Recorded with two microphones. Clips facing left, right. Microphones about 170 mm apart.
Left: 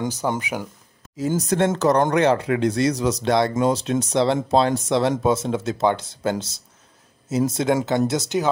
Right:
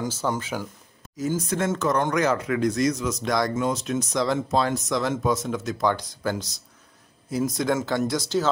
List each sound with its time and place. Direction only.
0.0 s speech: 20° left (ahead or behind)
1.1 s speech: 30° left (ahead or behind)